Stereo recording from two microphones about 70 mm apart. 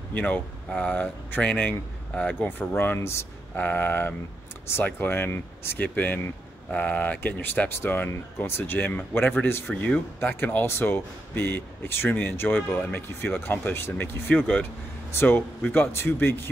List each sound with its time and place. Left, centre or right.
0.1 s speech: left
2.4 s speech: left
3.0 s speech: left
3.5 s speech: left
14.3 s speech: left